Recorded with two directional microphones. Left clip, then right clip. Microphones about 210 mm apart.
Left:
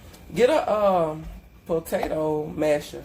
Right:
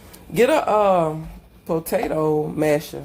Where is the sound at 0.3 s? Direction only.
35° right (ahead or behind).